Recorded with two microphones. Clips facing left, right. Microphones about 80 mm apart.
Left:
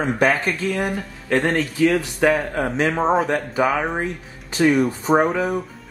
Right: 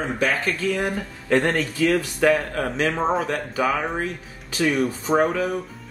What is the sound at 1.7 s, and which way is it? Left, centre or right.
Speech, centre.